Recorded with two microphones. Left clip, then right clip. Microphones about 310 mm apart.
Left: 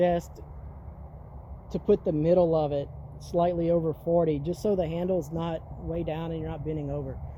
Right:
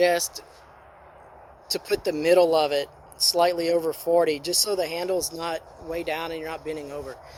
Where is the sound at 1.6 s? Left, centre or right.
Right.